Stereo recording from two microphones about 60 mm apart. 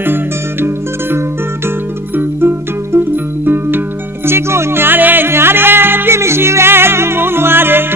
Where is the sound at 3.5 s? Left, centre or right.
Right.